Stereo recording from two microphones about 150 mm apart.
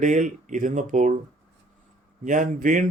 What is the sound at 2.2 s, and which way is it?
Speech, 55° right (ahead or behind).